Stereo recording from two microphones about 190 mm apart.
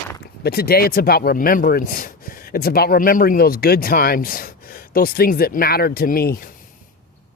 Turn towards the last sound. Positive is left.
turn(degrees=50)  # may be behind; listen again after turning